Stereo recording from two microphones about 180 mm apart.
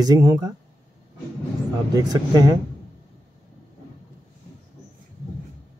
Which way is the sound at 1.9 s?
20° right (ahead or behind).